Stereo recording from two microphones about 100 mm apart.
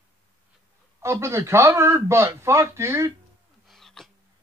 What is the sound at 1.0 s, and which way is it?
A man's voice, 25° right (ahead or behind).